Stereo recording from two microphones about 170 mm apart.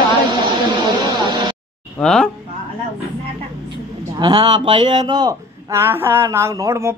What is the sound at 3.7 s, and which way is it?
Speech, 25° right (ahead or behind).